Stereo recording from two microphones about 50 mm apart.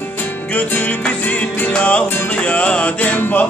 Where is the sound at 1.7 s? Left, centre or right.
Left.